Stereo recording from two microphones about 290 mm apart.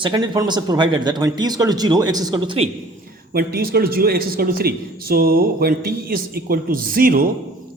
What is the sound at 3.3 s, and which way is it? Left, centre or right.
A man's voice, right.